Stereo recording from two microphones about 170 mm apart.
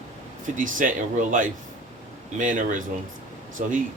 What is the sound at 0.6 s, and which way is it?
Speech, 50° right (ahead or behind).